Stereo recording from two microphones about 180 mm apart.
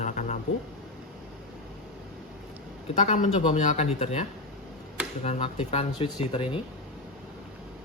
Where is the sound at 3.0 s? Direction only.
45° left (ahead or behind).